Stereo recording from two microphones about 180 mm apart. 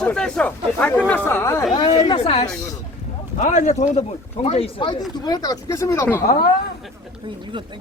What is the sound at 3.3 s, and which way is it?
A man's voice, 45° left (ahead or behind).